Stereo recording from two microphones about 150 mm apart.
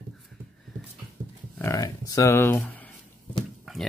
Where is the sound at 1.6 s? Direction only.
20° left (ahead or behind).